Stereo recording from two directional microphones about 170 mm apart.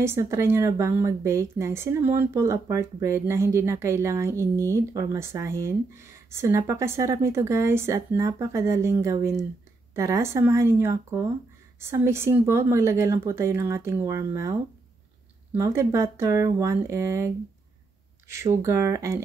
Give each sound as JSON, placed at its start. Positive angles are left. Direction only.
{"t": 0.0, "sound": "speech", "side_deg": -15}
{"t": 18.3, "sound": "speech", "side_deg": -15}